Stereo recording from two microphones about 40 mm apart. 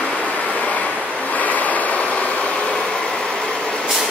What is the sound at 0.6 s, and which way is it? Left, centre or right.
Waves, left.